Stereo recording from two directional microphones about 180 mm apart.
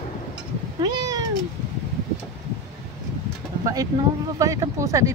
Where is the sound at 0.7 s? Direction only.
20° right (ahead or behind).